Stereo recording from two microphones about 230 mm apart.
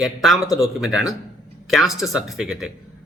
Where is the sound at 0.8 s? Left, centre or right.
Right.